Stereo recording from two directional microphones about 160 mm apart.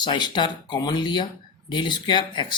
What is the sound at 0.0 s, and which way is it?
Speech, 30° left (ahead or behind).